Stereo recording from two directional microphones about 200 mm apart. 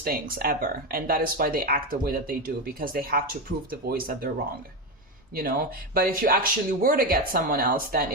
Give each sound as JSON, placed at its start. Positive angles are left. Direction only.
{"t": 0.0, "sound": "speech", "side_deg": -45}
{"t": 5.3, "sound": "speech", "side_deg": -50}